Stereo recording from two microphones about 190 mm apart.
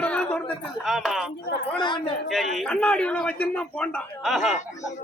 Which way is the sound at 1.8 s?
25° left (ahead or behind).